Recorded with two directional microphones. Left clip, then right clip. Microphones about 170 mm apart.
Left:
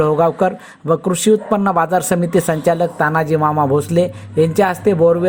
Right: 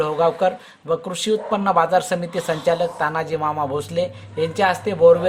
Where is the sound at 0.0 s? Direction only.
35° left (ahead or behind).